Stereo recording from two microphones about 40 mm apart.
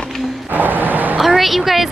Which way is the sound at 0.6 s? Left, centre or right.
Right.